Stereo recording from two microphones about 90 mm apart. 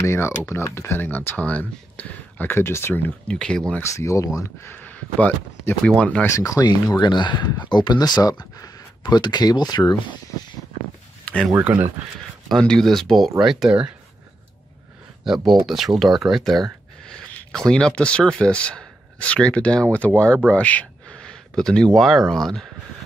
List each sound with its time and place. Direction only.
0.0 s speech: 30° left (ahead or behind)
3.3 s speech: 10° left (ahead or behind)
3.8 s speech: 35° left (ahead or behind)
4.7 s speech: 15° left (ahead or behind)
6.2 s speech: 35° left (ahead or behind); by 9.9 s 50° left (ahead or behind)
11.7 s speech: 10° right (ahead or behind)
12.4 s speech: 5° left (ahead or behind); by 13.9 s 10° right (ahead or behind)
15.2 s speech: 5° right (ahead or behind)